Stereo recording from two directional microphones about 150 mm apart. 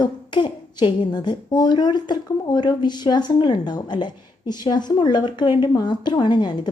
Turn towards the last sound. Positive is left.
turn(degrees=30)  # may be behind; listen again after turning